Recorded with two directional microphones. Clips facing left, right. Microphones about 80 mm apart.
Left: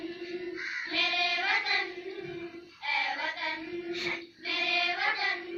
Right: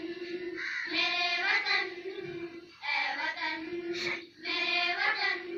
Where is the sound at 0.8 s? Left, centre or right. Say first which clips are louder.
Left 2 dB; right.